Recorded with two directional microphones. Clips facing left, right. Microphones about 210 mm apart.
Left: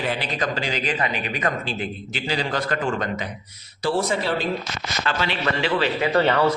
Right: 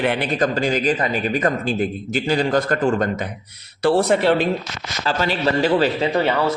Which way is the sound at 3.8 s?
65° right (ahead or behind).